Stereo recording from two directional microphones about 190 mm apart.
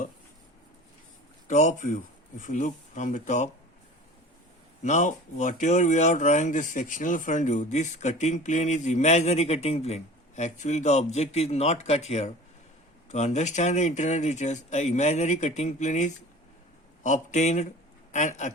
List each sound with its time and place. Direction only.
1.5 s speech: 40° left (ahead or behind)
4.8 s speech: 40° left (ahead or behind)